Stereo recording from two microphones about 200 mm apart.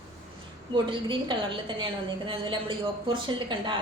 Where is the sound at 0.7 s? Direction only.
25° right (ahead or behind).